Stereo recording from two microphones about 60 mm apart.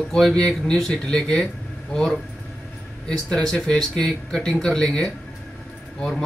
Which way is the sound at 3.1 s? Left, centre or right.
Centre.